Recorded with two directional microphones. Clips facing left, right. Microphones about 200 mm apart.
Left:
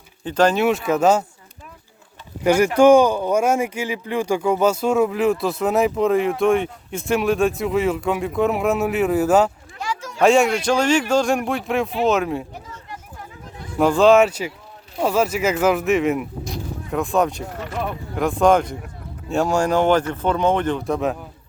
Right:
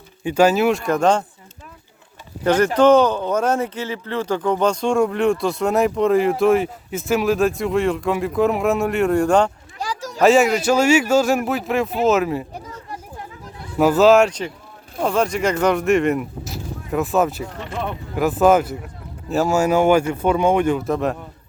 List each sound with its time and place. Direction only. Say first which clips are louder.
0.3 s speech: right 2 dB; 10° right (ahead or behind)
2.4 s speech: left 1 dB; 10° left (ahead or behind)
9.7 s a sound: right 1 dB; 35° right (ahead or behind)
10.2 s speech: right 1 dB; centre (ahead or behind)
13.7 s speech: right 1 dB; 5° right (ahead or behind)